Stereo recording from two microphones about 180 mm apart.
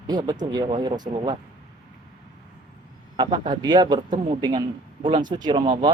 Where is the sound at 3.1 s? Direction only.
25° right (ahead or behind).